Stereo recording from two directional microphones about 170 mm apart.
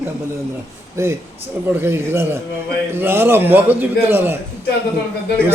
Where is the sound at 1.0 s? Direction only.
15° right (ahead or behind).